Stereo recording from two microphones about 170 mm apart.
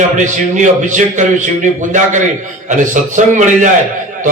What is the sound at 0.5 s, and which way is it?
A man's voice, 45° right (ahead or behind).